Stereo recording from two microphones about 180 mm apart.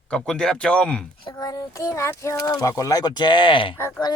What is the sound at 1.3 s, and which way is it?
Speech, 20° left (ahead or behind).